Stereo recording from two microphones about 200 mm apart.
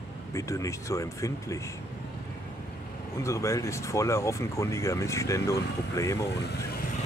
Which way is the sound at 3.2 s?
15° left (ahead or behind).